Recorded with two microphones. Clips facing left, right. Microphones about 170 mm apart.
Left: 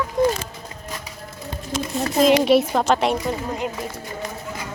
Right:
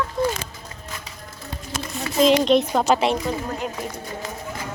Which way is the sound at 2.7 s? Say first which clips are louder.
Even; 5° right (ahead or behind).